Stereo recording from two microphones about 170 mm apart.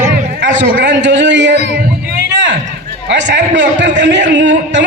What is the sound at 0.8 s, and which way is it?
Speech, 90° right.